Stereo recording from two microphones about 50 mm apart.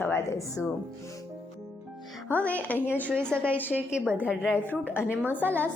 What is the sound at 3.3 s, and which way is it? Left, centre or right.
Speech, right.